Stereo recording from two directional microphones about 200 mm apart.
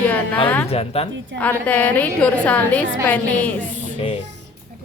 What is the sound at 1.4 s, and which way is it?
A woman's voice, 10° left (ahead or behind).